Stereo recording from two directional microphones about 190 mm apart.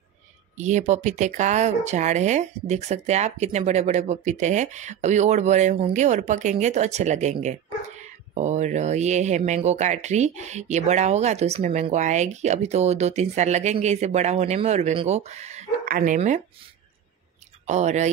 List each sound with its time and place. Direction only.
0.6 s speech: 40° right (ahead or behind)
17.6 s speech: 35° right (ahead or behind)